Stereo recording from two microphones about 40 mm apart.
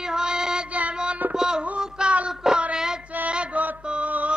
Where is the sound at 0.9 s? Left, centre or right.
Right.